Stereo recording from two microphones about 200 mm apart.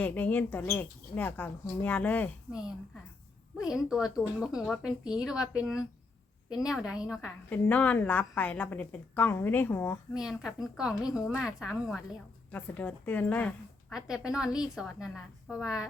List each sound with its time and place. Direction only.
0.0 s a woman's voice: 10° left (ahead or behind)
2.5 s speech: 5° right (ahead or behind)
7.5 s a woman's voice: 5° left (ahead or behind)
10.2 s a woman's voice: 5° right (ahead or behind)
13.9 s speech: 5° right (ahead or behind)